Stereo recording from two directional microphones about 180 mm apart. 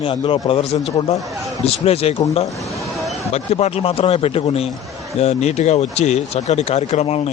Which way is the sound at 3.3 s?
35° left (ahead or behind).